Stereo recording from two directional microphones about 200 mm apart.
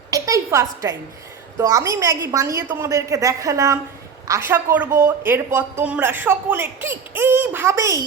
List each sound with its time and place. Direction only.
0.1 s a woman's voice: 15° right (ahead or behind)